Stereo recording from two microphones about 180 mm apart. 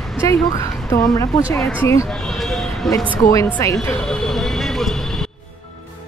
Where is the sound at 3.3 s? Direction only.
15° left (ahead or behind).